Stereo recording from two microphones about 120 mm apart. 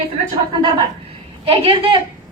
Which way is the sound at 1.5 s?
50° right (ahead or behind).